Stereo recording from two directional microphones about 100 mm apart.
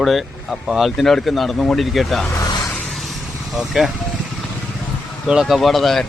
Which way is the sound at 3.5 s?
5° right (ahead or behind).